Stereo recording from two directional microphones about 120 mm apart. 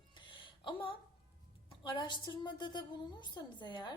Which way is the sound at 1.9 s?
40° left (ahead or behind).